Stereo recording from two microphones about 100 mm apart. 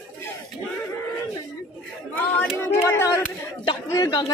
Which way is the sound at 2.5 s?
25° left (ahead or behind).